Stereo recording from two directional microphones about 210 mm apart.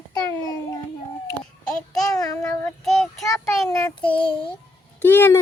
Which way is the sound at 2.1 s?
15° left (ahead or behind).